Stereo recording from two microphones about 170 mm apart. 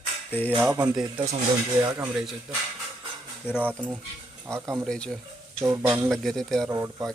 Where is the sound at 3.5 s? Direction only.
10° right (ahead or behind).